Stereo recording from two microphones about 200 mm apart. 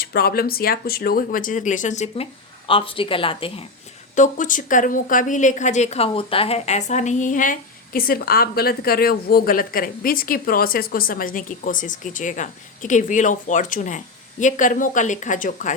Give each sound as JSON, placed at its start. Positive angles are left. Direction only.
{"t": 0.0, "sound": "a woman's voice", "side_deg": 50}
{"t": 4.1, "sound": "speech", "side_deg": 40}